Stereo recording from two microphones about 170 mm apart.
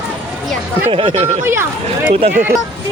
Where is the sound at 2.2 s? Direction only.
40° right (ahead or behind).